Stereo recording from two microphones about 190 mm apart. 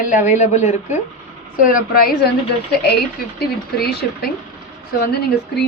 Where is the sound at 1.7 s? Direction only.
50° left (ahead or behind).